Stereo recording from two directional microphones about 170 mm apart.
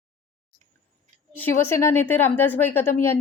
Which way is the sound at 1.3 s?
15° left (ahead or behind).